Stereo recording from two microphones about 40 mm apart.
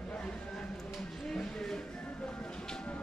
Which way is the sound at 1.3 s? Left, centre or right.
Centre.